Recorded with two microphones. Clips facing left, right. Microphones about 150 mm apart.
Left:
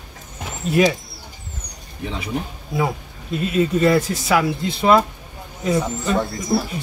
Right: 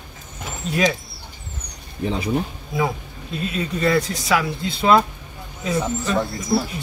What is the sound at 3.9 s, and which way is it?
A man's voice, centre (ahead or behind).